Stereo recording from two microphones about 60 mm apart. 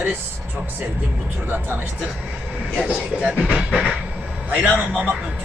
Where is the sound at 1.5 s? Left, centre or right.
Right.